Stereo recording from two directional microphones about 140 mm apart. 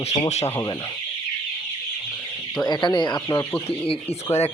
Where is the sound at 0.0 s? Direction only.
50° left (ahead or behind).